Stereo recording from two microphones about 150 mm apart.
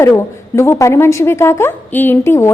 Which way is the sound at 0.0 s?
20° left (ahead or behind).